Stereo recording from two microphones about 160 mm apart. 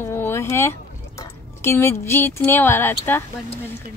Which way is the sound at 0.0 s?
15° left (ahead or behind).